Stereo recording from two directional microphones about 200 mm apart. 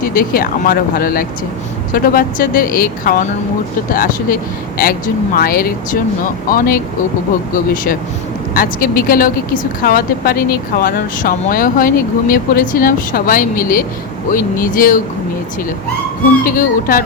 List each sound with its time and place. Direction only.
0.0 s speech: 45° left (ahead or behind)
7.5 s speech: 45° left (ahead or behind)
16.4 s speech: 45° left (ahead or behind)